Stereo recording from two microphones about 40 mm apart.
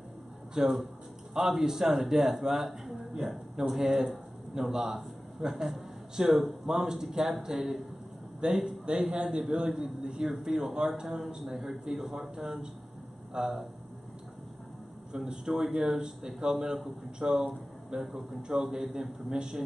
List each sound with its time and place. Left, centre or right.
0.6 s a man's voice: centre
11.6 s a man's voice: centre
15.1 s a man's voice: centre